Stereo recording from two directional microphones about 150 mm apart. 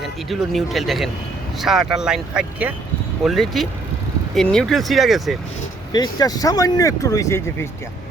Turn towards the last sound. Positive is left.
turn(degrees=15)  # may be behind; listen again after turning